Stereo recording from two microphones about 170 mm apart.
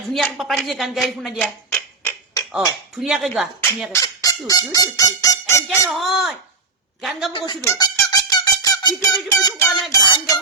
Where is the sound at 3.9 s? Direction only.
20° left (ahead or behind).